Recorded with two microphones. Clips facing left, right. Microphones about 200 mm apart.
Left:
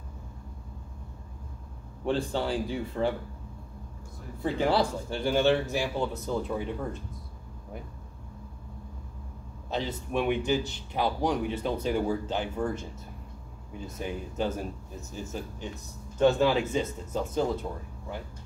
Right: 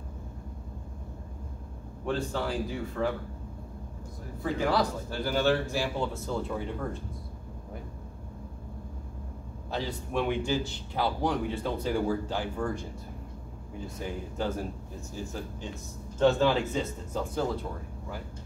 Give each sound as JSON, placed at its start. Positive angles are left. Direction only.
{"t": 2.0, "sound": "speech", "side_deg": 30}
{"t": 4.4, "sound": "speech", "side_deg": 30}
{"t": 9.7, "sound": "speech", "side_deg": 20}
{"t": 13.8, "sound": "speech", "side_deg": 20}